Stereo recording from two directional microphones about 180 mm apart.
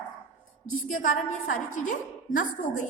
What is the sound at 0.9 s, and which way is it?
A woman's voice, 45° left (ahead or behind).